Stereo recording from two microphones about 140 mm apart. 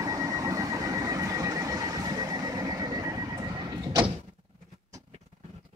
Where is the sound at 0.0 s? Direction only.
25° right (ahead or behind).